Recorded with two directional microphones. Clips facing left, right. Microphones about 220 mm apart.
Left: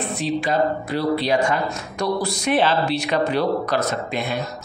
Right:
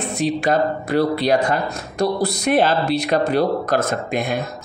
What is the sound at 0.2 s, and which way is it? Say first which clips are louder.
Speech: right 3 dB; 45° right (ahead or behind).